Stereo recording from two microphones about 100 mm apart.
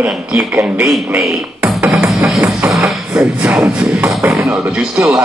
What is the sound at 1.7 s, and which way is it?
Music, 5° right (ahead or behind).